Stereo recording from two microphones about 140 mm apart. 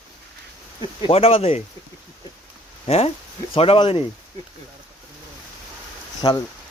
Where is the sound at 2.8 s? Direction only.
45° left (ahead or behind).